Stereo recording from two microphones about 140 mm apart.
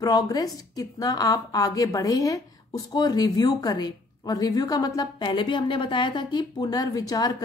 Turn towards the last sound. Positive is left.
turn(degrees=25)  # may be behind; listen again after turning